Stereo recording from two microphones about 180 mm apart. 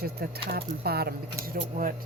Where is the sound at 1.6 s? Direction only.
50° right (ahead or behind).